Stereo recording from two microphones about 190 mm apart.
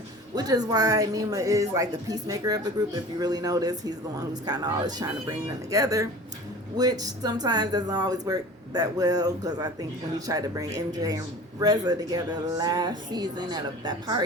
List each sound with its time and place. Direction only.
0.3 s speech: 20° right (ahead or behind)